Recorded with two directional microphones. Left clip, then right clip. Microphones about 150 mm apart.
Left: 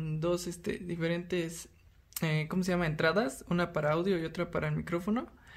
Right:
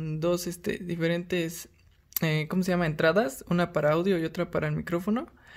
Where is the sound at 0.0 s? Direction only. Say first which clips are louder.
Right 5 dB; 45° right (ahead or behind).